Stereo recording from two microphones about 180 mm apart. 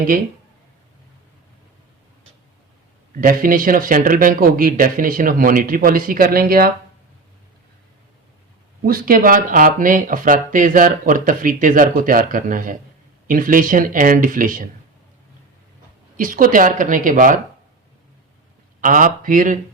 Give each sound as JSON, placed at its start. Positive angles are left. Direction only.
{"t": 3.2, "sound": "speech", "side_deg": -50}
{"t": 8.8, "sound": "speech", "side_deg": -55}
{"t": 16.1, "sound": "speech", "side_deg": -50}
{"t": 18.8, "sound": "speech", "side_deg": -50}